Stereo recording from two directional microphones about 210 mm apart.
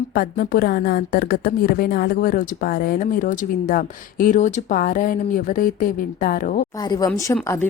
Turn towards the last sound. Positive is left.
turn(degrees=15)  # may be behind; listen again after turning